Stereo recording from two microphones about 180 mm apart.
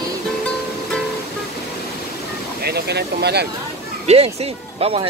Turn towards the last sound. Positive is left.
turn(degrees=-35)  # may be behind; listen again after turning